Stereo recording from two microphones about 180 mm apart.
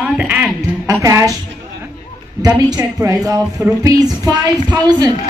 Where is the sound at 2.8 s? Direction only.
15° right (ahead or behind).